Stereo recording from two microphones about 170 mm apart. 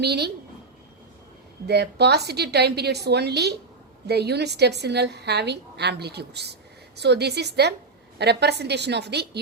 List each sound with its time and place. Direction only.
0.0 s a woman's voice: 75° right (ahead or behind)
1.6 s a woman's voice: 75° right (ahead or behind)